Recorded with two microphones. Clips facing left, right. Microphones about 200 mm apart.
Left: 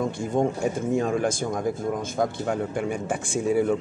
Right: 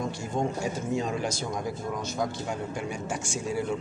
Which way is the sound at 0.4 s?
55° left (ahead or behind).